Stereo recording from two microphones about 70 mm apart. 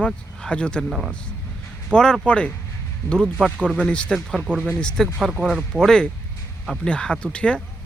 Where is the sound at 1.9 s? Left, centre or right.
Centre.